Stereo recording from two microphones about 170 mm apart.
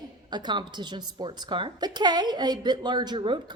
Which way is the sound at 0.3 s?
25° right (ahead or behind).